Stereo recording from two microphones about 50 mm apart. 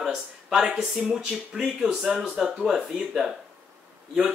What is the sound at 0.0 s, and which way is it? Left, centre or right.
Speech, centre.